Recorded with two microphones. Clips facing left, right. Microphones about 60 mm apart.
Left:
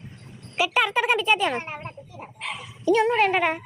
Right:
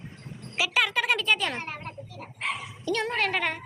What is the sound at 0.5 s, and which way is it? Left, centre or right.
Speech, centre.